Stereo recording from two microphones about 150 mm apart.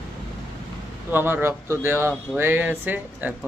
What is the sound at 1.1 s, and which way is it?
Speech, 15° right (ahead or behind).